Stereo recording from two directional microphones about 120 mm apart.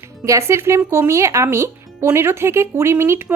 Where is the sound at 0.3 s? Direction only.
25° right (ahead or behind).